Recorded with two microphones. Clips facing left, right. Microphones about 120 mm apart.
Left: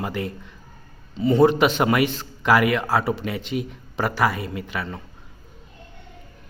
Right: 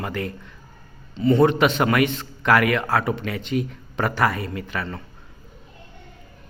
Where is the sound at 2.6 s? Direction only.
20° left (ahead or behind).